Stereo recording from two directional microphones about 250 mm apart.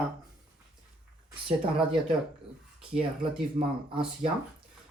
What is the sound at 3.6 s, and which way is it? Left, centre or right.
Speech, right.